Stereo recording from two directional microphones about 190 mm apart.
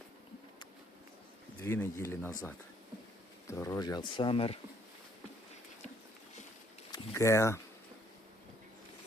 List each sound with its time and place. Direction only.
1.6 s speech: 15° left (ahead or behind)
3.4 s speech: 15° left (ahead or behind)
6.9 s speech: 15° left (ahead or behind)